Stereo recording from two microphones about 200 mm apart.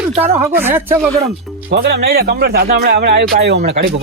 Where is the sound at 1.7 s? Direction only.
55° right (ahead or behind).